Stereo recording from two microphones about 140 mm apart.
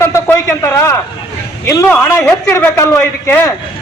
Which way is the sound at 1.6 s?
20° left (ahead or behind).